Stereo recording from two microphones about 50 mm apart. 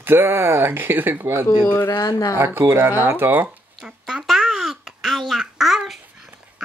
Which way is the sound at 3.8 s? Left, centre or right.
Centre.